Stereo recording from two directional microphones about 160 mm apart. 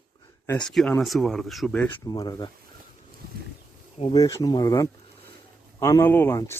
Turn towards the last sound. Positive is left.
turn(degrees=15)  # may be behind; listen again after turning